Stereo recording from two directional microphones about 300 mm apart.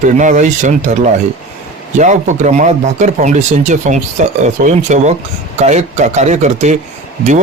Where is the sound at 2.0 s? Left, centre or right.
Right.